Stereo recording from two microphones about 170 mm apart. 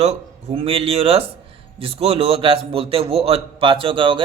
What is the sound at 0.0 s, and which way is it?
A man's voice, 35° right (ahead or behind).